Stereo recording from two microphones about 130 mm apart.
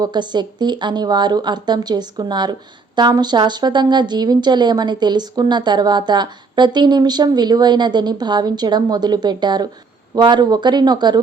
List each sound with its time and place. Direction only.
0.0 s speech: 35° right (ahead or behind)